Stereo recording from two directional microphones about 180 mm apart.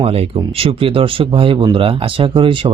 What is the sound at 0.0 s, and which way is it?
Speech, 30° right (ahead or behind).